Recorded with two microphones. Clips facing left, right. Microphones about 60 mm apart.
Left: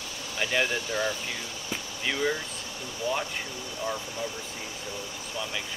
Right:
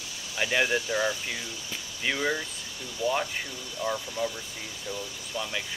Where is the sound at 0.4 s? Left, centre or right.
Centre.